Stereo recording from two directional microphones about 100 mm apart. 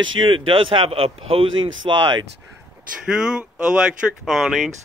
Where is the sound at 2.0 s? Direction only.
45° right (ahead or behind).